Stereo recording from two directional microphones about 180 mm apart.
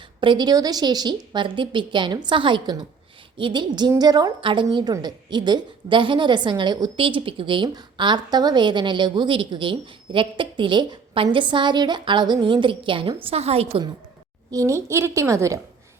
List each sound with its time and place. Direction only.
0.2 s a woman's voice: 25° right (ahead or behind)
14.5 s a woman's voice: 15° right (ahead or behind)